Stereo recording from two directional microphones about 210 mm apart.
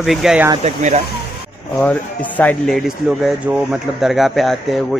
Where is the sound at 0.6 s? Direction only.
30° right (ahead or behind).